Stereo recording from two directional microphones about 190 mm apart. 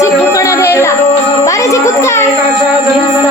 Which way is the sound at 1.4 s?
15° left (ahead or behind).